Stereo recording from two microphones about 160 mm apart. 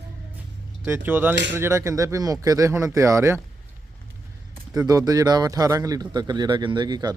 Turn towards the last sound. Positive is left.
turn(degrees=-25)  # may be behind; listen again after turning